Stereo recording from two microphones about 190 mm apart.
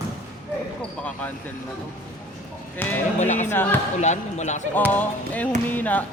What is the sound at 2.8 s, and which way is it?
Music, 10° left (ahead or behind).